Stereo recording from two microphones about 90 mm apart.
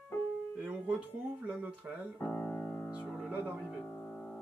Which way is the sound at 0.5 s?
15° right (ahead or behind).